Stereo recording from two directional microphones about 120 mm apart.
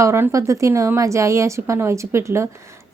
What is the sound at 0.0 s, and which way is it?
A woman's voice, 25° right (ahead or behind).